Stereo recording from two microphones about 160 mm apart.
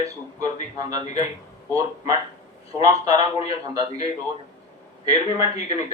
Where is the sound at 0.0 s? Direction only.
20° right (ahead or behind).